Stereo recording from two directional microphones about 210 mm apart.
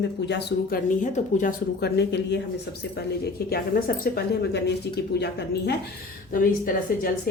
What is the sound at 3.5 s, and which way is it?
Speech, 45° left (ahead or behind).